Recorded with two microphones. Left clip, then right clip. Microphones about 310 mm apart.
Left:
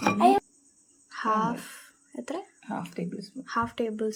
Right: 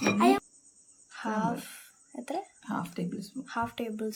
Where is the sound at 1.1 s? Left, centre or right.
Centre.